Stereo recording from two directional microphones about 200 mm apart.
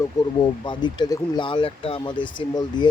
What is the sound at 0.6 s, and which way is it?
Speech, 20° left (ahead or behind).